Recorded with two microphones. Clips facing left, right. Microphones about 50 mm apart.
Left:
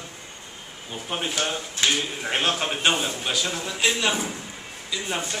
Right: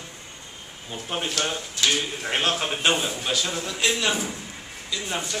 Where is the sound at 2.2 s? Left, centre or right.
Centre.